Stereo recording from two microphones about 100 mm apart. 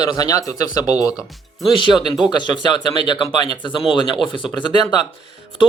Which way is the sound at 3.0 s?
50° left (ahead or behind).